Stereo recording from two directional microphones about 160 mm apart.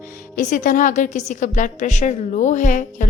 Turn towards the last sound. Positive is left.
turn(degrees=50)  # may be behind; listen again after turning